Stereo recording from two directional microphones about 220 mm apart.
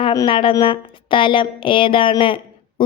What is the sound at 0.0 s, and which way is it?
A woman's voice, 20° left (ahead or behind).